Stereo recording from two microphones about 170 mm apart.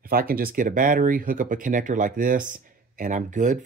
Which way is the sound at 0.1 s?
60° right (ahead or behind).